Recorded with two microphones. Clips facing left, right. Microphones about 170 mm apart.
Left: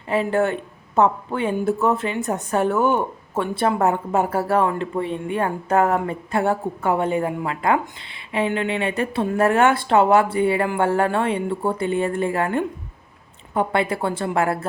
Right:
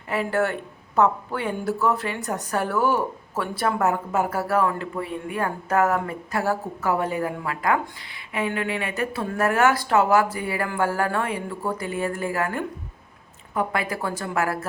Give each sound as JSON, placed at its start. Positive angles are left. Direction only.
{"t": 0.1, "sound": "a woman's voice", "side_deg": 25}